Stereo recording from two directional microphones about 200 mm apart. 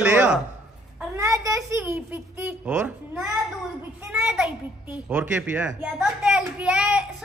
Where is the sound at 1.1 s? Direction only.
15° right (ahead or behind).